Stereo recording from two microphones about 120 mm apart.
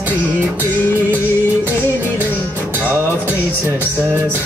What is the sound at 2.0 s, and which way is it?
Music, 15° left (ahead or behind).